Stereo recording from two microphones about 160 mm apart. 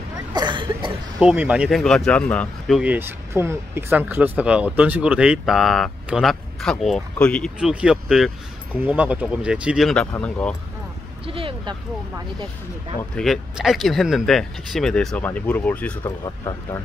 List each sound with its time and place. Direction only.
0.3 s cough: 30° right (ahead or behind)
1.2 s speech: 10° right (ahead or behind); by 2.8 s 10° left (ahead or behind)
2.8 s speech: 10° right (ahead or behind); by 7.5 s 5° left (ahead or behind)
7.5 s speech: 5° right (ahead or behind)
11.2 s speech: 35° right (ahead or behind)
13.1 s speech: centre (ahead or behind)
16.0 s speech: 20° left (ahead or behind)